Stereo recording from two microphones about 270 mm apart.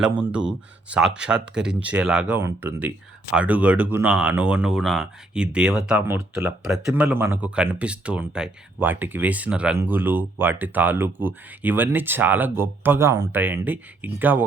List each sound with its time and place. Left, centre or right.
0.0 s speech: centre